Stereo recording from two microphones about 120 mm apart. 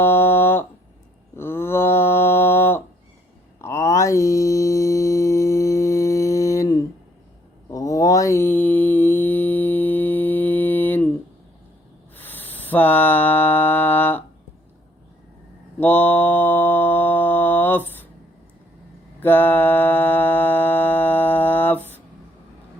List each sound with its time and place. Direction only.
0.0 s a sound: 20° left (ahead or behind)
1.4 s mantra: 20° left (ahead or behind)
8.4 s mantra: 15° left (ahead or behind)
12.1 s music: 15° left (ahead or behind)
15.8 s mantra: 15° left (ahead or behind)
19.2 s music: 15° left (ahead or behind)